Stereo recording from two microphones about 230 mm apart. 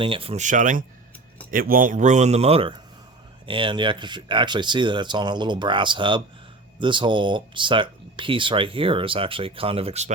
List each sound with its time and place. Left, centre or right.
0.0 s a man's voice: right